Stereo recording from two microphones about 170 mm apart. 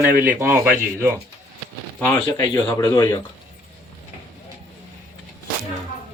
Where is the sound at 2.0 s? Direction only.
15° left (ahead or behind).